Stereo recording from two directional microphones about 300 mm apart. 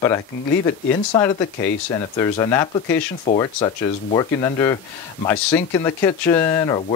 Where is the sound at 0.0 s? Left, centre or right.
Centre.